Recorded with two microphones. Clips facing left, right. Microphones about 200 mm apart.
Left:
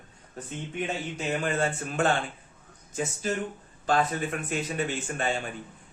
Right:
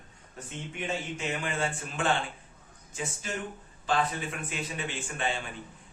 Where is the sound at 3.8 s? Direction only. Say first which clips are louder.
Left 3 dB; 45° left (ahead or behind).